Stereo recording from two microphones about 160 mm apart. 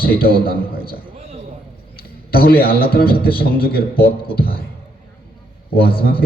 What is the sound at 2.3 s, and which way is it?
A man's voice, 70° left (ahead or behind).